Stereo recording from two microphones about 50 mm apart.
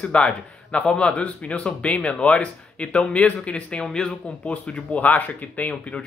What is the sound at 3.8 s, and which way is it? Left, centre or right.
Speech, centre.